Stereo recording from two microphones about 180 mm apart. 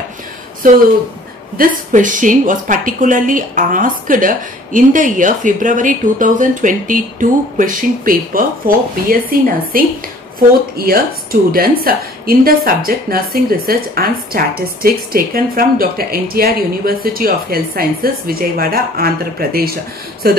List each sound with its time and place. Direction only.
0.6 s a woman's voice: 50° right (ahead or behind)